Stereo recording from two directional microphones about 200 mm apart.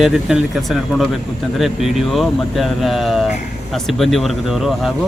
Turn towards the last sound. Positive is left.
turn(degrees=0)  # may be behind; listen again after turning